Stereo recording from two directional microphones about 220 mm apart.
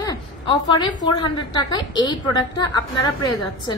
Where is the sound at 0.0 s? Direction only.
20° left (ahead or behind).